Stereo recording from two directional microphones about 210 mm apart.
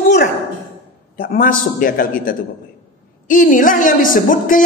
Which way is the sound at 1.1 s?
40° left (ahead or behind).